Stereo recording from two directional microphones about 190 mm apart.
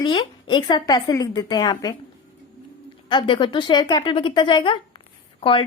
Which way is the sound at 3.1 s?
25° left (ahead or behind).